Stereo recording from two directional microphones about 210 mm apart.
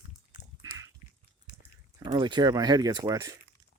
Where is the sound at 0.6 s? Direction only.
15° right (ahead or behind).